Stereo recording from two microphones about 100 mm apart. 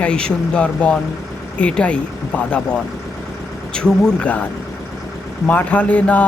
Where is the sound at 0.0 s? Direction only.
10° left (ahead or behind).